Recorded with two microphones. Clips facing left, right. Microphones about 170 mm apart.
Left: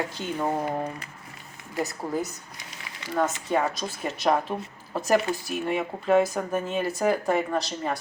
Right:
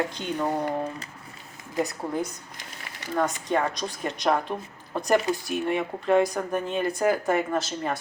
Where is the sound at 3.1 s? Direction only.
5° left (ahead or behind).